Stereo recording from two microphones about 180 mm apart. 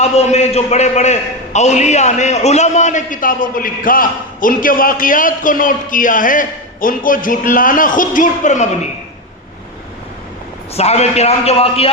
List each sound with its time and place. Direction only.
0.0 s a man's voice: 35° left (ahead or behind)
10.8 s a man's voice: 35° left (ahead or behind)